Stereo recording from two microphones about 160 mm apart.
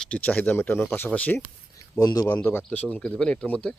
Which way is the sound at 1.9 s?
20° left (ahead or behind).